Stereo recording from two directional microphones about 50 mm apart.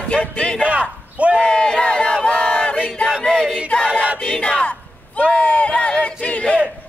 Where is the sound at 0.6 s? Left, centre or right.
Right.